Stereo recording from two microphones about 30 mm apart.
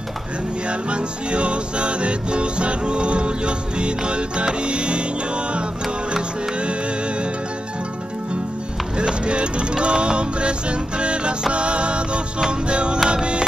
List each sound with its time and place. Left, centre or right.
0.7 s music: right
8.9 s music: right